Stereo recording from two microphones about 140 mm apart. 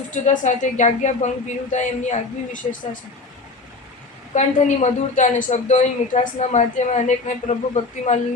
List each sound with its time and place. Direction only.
0.1 s a woman's voice: 60° left (ahead or behind)
4.4 s a woman's voice: 60° left (ahead or behind)